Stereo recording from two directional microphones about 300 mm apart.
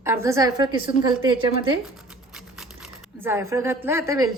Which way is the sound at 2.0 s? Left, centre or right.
Centre.